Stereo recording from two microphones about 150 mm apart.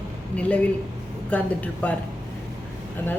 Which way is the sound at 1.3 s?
10° left (ahead or behind).